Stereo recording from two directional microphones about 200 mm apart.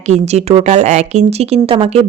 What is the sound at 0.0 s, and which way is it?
A woman's voice, 35° right (ahead or behind).